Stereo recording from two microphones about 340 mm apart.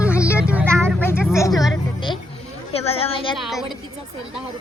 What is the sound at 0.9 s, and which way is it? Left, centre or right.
Vehicle, centre.